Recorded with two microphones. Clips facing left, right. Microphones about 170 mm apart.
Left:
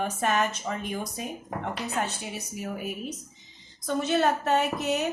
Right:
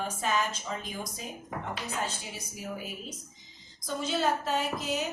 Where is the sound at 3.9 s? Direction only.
60° left (ahead or behind).